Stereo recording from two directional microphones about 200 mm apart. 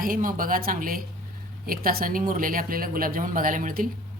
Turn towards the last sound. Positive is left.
turn(degrees=-45)  # may be behind; listen again after turning